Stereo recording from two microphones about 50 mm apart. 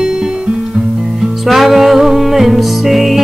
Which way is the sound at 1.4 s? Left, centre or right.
Centre.